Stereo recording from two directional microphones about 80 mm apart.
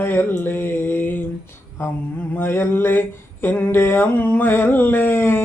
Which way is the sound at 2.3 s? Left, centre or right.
Left.